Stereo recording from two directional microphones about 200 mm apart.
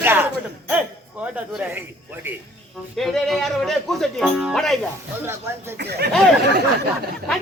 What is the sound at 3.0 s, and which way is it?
A man's voice, centre (ahead or behind).